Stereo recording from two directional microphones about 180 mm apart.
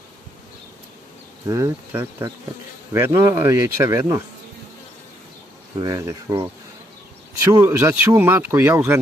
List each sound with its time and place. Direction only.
1.5 s speech: 15° right (ahead or behind)
5.8 s speech: 20° right (ahead or behind)